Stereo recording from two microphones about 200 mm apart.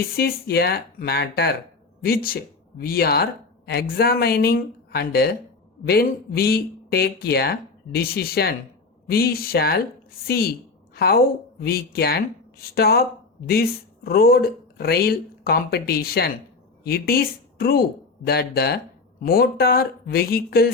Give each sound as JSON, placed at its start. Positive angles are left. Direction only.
{"t": 0.2, "sound": "a woman's voice", "side_deg": 50}